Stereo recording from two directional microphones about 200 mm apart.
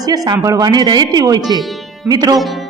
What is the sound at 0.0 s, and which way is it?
A man's voice, 20° right (ahead or behind).